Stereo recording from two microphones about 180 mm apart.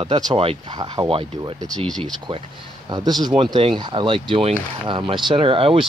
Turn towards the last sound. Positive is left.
turn(degrees=-30)  # may be behind; listen again after turning